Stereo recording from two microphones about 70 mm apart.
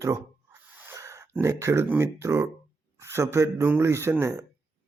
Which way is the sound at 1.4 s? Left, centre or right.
Right.